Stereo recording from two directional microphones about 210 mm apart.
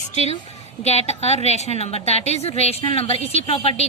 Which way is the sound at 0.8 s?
30° left (ahead or behind).